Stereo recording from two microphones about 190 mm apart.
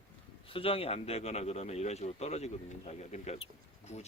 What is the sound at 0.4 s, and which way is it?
Speech, 30° left (ahead or behind).